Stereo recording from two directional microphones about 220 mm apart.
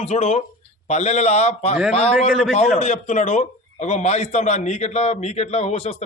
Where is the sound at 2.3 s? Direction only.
5° left (ahead or behind).